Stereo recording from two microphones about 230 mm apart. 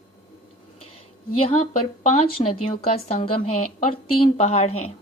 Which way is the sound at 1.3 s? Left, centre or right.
Left.